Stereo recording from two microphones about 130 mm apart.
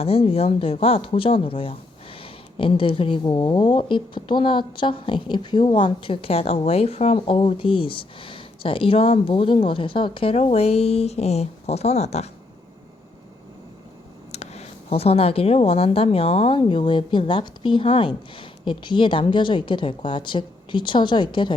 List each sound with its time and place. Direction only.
0.0 s speech: 50° left (ahead or behind)
14.3 s speech: 55° left (ahead or behind); by 21.5 s 35° left (ahead or behind)